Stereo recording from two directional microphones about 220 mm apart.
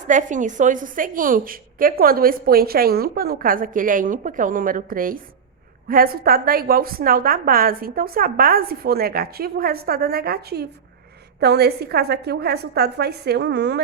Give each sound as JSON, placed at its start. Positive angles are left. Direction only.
{"t": 0.1, "sound": "a woman's voice", "side_deg": -35}